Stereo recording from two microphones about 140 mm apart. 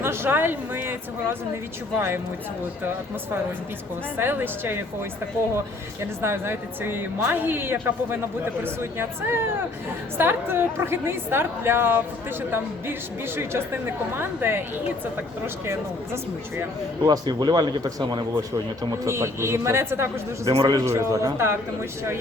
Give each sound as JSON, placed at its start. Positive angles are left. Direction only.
{"t": 0.0, "sound": "a woman's voice", "side_deg": -15}
{"t": 4.2, "sound": "a woman's voice", "side_deg": -15}
{"t": 6.0, "sound": "a woman's voice", "side_deg": -15}
{"t": 17.0, "sound": "a man's voice", "side_deg": -30}